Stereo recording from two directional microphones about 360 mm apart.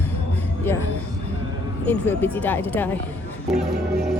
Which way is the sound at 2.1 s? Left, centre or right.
Centre.